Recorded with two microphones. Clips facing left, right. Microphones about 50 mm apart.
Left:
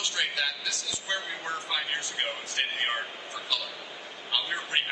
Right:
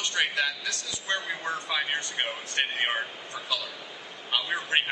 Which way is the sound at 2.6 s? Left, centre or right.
Right.